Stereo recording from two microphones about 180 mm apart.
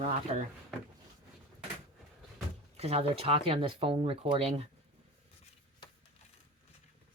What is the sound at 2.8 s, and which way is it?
Speech, 35° right (ahead or behind).